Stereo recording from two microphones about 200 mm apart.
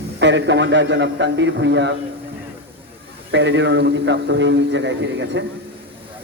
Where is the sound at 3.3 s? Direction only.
65° right (ahead or behind).